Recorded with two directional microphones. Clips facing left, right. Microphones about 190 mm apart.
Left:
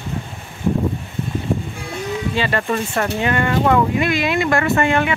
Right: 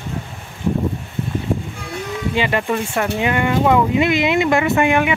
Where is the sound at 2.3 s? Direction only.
15° right (ahead or behind).